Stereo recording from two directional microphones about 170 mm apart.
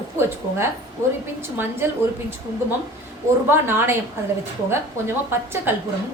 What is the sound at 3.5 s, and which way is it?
Speech, 15° right (ahead or behind).